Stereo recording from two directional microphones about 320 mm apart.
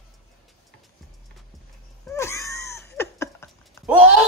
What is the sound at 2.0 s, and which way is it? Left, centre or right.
Cat, centre.